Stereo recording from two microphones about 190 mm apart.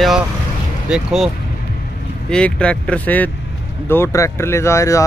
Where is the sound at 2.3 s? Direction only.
5° left (ahead or behind).